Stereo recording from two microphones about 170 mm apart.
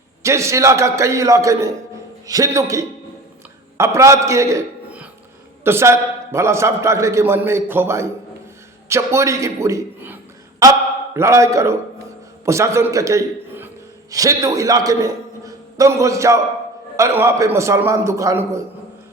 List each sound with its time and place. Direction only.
0.2 s a man's voice: 15° right (ahead or behind)